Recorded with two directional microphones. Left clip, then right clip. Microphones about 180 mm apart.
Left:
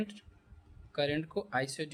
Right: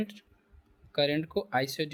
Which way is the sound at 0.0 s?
30° right (ahead or behind).